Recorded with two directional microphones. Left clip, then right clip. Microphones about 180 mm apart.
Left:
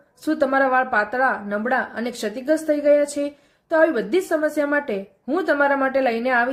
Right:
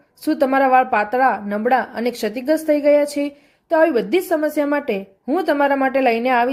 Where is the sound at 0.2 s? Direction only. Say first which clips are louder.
Right 3 dB; 30° right (ahead or behind).